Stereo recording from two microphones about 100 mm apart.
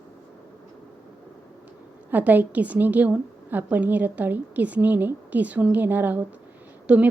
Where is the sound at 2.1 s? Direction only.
15° right (ahead or behind).